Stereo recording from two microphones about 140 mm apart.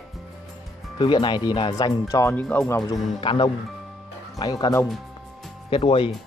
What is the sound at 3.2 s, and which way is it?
Speech, 40° left (ahead or behind).